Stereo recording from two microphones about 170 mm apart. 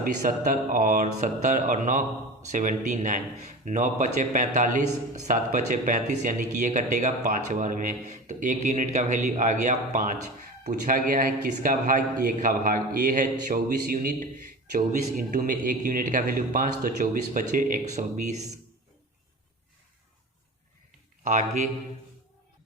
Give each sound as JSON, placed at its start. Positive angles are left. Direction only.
{"t": 0.0, "sound": "a man's voice", "side_deg": -50}
{"t": 21.2, "sound": "a man's voice", "side_deg": -45}